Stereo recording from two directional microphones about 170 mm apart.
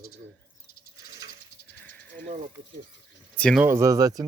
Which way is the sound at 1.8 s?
10° left (ahead or behind).